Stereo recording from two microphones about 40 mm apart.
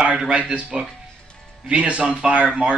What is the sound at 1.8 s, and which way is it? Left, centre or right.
Speech, right.